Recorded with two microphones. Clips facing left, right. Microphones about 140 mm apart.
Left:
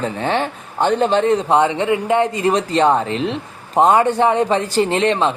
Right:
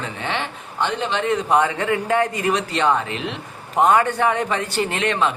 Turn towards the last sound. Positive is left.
turn(degrees=30)  # may be behind; listen again after turning